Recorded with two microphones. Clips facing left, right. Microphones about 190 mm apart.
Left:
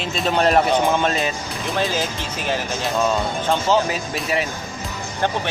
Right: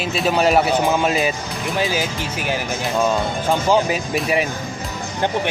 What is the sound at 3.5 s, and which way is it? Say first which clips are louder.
Speech: right 2 dB; 15° right (ahead or behind).